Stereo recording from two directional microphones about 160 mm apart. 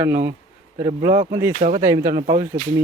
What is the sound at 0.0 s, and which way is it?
Speech, 15° right (ahead or behind).